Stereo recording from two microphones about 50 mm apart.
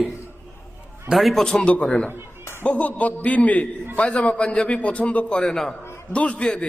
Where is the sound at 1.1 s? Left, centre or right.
Centre.